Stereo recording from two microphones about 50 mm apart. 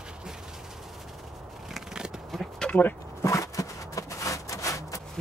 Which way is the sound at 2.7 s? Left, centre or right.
Left.